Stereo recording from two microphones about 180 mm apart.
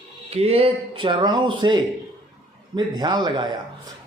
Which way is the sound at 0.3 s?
35° right (ahead or behind).